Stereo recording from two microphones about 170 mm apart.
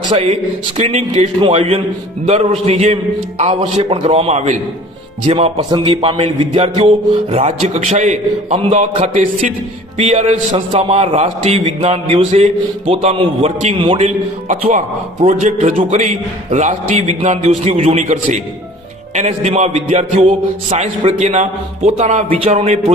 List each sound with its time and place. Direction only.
0.1 s a man's voice: 40° right (ahead or behind)